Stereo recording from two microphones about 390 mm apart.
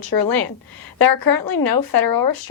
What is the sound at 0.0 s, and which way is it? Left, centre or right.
A woman's voice, left.